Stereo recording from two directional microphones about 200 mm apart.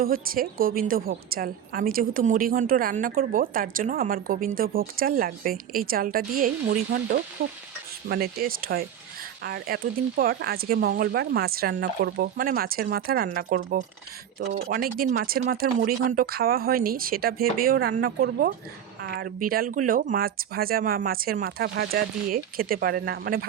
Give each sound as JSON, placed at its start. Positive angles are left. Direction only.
{"t": 0.0, "sound": "a woman's voice", "side_deg": -45}